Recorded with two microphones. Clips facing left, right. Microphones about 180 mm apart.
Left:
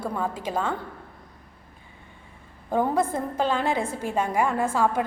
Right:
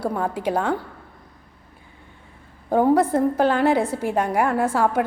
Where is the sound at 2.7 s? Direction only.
10° right (ahead or behind).